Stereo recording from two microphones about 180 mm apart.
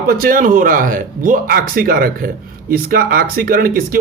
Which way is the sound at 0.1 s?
50° right (ahead or behind).